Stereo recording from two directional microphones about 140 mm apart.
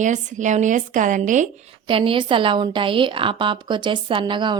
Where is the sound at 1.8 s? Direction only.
40° right (ahead or behind).